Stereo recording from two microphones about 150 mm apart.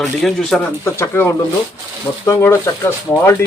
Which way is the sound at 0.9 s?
15° left (ahead or behind).